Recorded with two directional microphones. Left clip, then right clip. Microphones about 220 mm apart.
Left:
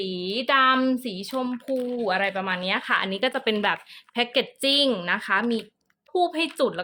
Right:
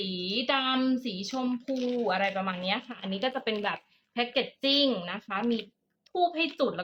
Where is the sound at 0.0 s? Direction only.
45° left (ahead or behind).